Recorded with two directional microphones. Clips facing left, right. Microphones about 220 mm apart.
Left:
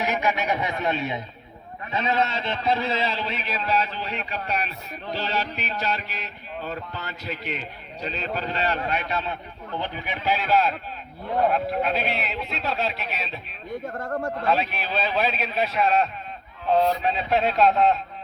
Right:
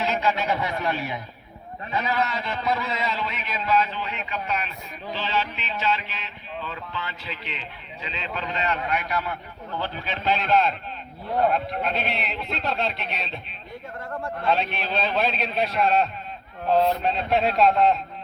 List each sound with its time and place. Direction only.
0.0 s a man's voice: 15° left (ahead or behind)
13.8 s speech: 45° left (ahead or behind)
14.4 s a man's voice: centre (ahead or behind)